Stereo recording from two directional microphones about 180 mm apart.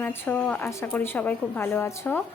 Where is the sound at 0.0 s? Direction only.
10° left (ahead or behind).